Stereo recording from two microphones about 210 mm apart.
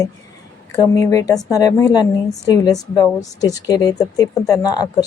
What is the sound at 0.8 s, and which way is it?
A woman's voice, 15° left (ahead or behind).